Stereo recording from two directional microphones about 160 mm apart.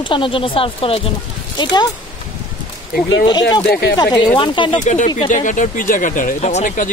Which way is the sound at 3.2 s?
25° left (ahead or behind).